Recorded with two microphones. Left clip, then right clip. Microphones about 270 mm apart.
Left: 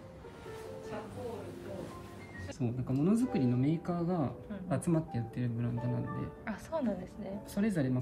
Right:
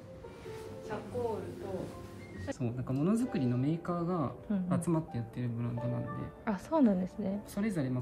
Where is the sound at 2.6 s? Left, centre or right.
Centre.